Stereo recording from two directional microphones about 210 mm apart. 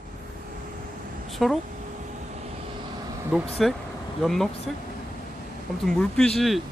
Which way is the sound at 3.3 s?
Centre (ahead or behind).